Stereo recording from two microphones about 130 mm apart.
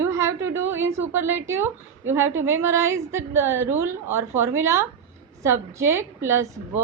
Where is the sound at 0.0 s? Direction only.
20° right (ahead or behind).